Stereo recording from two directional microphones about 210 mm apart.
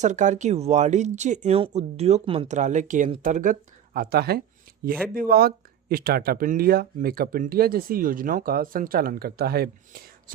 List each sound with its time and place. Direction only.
0.0 s speech: 35° right (ahead or behind)